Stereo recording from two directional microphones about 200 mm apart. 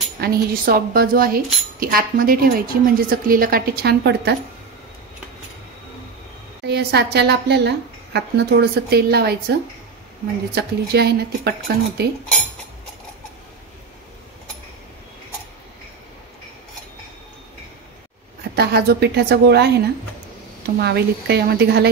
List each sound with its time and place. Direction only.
0.2 s speech: 50° right (ahead or behind)
6.6 s a woman's voice: 55° right (ahead or behind)
10.5 s speech: 55° right (ahead or behind)
18.5 s a woman's voice: 50° right (ahead or behind)
20.8 s a woman's voice: 55° right (ahead or behind)